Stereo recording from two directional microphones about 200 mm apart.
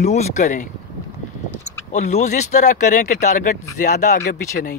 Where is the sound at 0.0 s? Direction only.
35° left (ahead or behind).